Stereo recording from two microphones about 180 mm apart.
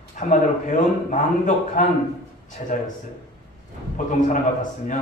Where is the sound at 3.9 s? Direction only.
45° left (ahead or behind).